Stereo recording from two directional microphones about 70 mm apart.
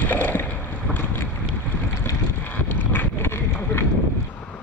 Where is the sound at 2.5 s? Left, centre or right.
Left.